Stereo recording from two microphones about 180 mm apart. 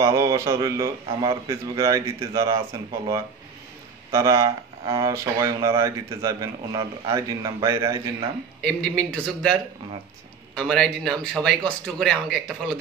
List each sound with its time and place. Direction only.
0.0 s speech: 15° right (ahead or behind)
4.1 s speech: 15° right (ahead or behind)
8.5 s a man's voice: centre (ahead or behind)